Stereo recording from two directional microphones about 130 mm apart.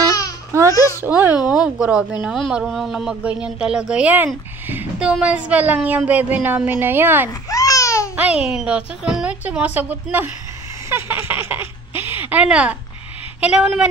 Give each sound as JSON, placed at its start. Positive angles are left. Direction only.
{"t": 0.5, "sound": "babbling", "side_deg": -25}
{"t": 1.0, "sound": "a woman's voice", "side_deg": -15}
{"t": 7.4, "sound": "a sound", "side_deg": 25}
{"t": 8.2, "sound": "a woman's voice", "side_deg": -10}